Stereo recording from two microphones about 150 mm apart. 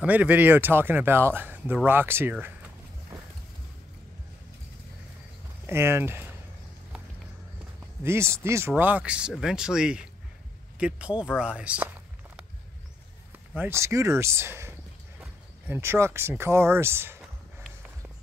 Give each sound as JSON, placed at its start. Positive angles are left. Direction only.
{"t": 0.0, "sound": "speech", "side_deg": -10}
{"t": 5.7, "sound": "speech", "side_deg": -15}
{"t": 8.0, "sound": "speech", "side_deg": -15}
{"t": 13.6, "sound": "speech", "side_deg": -15}